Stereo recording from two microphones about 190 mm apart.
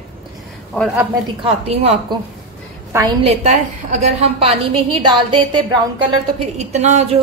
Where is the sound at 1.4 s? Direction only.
30° right (ahead or behind).